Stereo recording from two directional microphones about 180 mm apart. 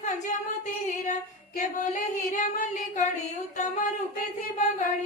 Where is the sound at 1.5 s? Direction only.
45° left (ahead or behind).